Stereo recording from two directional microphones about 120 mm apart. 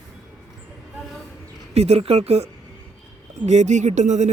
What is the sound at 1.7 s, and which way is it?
Speech, 60° right (ahead or behind).